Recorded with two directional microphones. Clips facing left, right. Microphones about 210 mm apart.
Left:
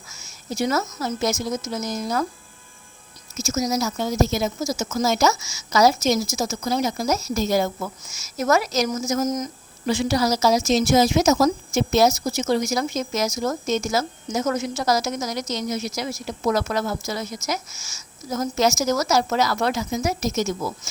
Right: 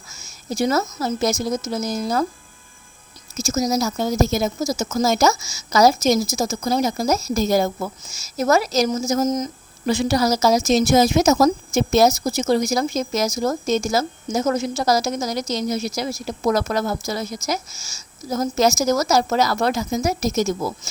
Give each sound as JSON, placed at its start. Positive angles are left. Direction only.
{"t": 0.1, "sound": "a woman's voice", "side_deg": -35}
{"t": 3.3, "sound": "a woman's voice", "side_deg": -35}
{"t": 9.8, "sound": "a woman's voice", "side_deg": -40}